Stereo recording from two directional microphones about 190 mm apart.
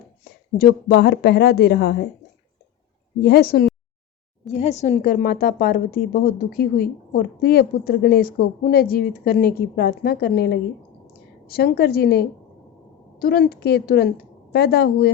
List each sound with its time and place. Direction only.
0.5 s a woman's voice: 50° left (ahead or behind)
3.2 s a woman's voice: 55° left (ahead or behind)
4.5 s a woman's voice: 35° left (ahead or behind); by 15.1 s 55° left (ahead or behind)